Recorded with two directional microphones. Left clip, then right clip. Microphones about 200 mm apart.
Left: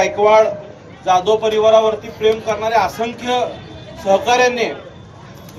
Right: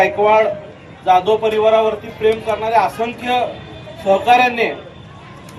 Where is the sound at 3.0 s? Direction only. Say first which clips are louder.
Right 1 dB; 30° right (ahead or behind).